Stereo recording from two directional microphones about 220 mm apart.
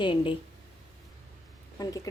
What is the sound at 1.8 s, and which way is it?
Speech, 15° left (ahead or behind).